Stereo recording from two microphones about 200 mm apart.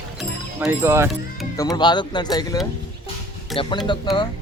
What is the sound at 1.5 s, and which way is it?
Speech, 20° left (ahead or behind).